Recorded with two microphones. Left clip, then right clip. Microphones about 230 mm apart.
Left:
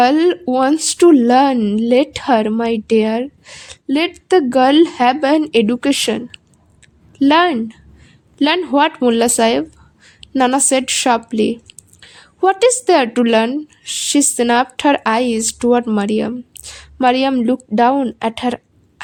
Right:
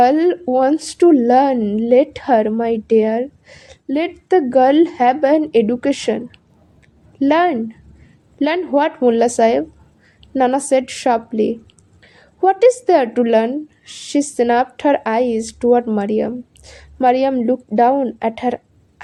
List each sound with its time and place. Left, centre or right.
0.0 s speech: left